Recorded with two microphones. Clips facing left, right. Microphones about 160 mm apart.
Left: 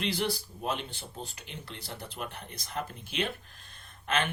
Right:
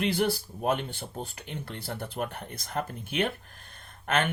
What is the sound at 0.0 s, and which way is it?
Speech, 55° right (ahead or behind).